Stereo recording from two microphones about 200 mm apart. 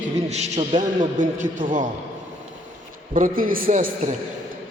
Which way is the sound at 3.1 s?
45° right (ahead or behind).